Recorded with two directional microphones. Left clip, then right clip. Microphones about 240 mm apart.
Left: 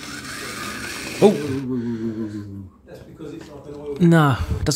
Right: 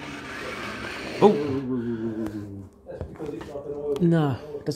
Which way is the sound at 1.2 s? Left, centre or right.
Left.